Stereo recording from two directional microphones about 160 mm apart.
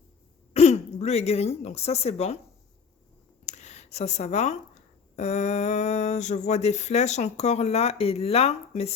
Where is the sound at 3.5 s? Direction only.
45° left (ahead or behind).